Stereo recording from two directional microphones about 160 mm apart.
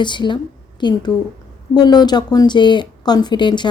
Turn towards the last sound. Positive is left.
turn(degrees=30)  # may be behind; listen again after turning